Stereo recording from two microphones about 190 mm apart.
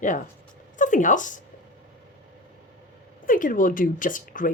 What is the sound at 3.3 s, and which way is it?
Speech, 45° left (ahead or behind).